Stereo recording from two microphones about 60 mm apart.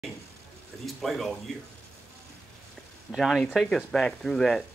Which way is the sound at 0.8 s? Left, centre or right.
Centre.